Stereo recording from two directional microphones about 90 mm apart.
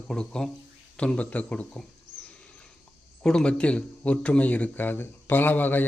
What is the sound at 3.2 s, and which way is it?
Speech, 10° left (ahead or behind).